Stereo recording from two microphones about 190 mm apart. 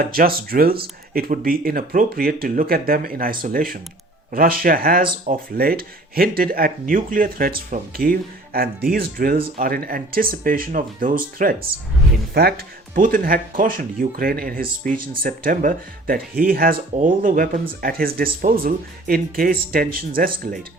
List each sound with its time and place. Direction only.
0.0 s speech: 50° right (ahead or behind)